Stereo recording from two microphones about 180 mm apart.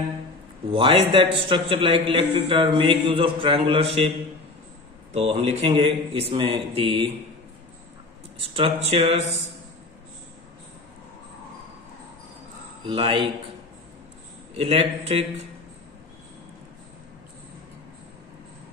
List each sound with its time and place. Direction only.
0.7 s a man's voice: 30° right (ahead or behind)
5.1 s a man's voice: 35° right (ahead or behind)
8.5 s a man's voice: 30° right (ahead or behind)
12.8 s a man's voice: 30° right (ahead or behind)
14.6 s a man's voice: 30° right (ahead or behind)